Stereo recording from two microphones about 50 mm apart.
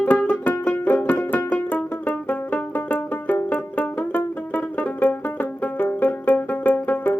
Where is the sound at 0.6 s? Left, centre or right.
Left.